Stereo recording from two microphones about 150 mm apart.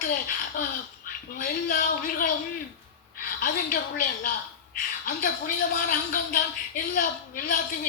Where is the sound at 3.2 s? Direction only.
70° left (ahead or behind).